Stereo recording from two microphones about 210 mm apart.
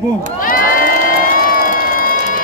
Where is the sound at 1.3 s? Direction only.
40° left (ahead or behind).